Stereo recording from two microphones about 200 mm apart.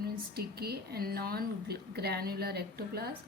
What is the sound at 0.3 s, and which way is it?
A woman's voice, 50° right (ahead or behind).